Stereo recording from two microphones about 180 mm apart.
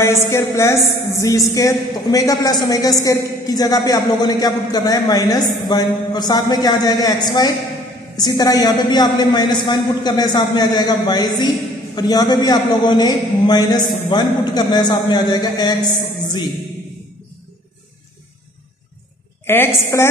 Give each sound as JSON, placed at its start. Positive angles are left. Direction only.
{"t": 0.0, "sound": "a woman's voice", "side_deg": 15}
{"t": 19.4, "sound": "a woman's voice", "side_deg": 10}